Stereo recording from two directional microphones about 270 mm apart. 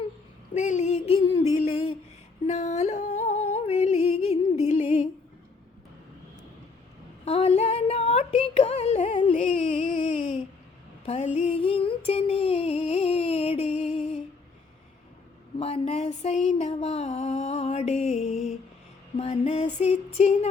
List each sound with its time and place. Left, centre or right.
0.5 s a sound: left
2.5 s humming: left
7.3 s singing: left
11.0 s mantra: left
11.3 s music: left
15.5 s a sound: left